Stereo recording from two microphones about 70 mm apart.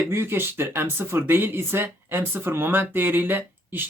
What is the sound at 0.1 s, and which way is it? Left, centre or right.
Speech, right.